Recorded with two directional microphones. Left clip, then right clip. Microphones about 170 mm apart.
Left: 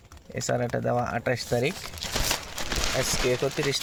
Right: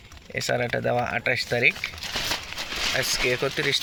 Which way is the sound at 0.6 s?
Centre (ahead or behind).